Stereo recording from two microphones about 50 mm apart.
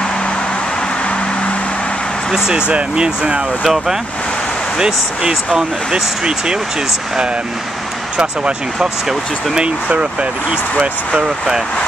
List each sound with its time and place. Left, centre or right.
2.3 s speech: centre
3.6 s speech: centre
8.2 s speech: centre